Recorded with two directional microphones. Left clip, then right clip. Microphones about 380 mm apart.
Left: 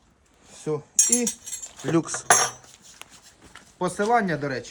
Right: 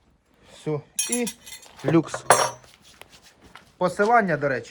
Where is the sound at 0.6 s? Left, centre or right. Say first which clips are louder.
Left 4 dB; centre.